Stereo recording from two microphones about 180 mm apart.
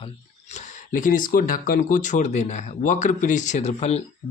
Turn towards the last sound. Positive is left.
turn(degrees=35)  # may be behind; listen again after turning